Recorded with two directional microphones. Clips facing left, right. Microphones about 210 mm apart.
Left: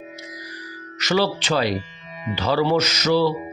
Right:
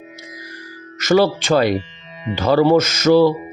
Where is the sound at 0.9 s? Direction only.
50° right (ahead or behind).